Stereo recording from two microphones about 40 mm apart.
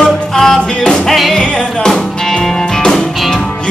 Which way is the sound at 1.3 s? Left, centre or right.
Left.